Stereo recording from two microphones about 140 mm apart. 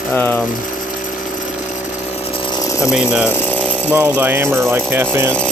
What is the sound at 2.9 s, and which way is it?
Speech, 5° right (ahead or behind).